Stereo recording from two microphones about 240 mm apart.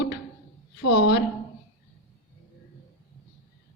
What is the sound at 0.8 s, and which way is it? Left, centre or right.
Speech, left.